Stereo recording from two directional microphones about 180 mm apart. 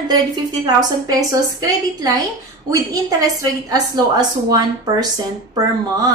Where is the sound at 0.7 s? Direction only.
20° right (ahead or behind).